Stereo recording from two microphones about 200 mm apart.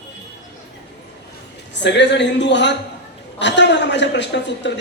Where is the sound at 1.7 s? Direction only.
60° left (ahead or behind).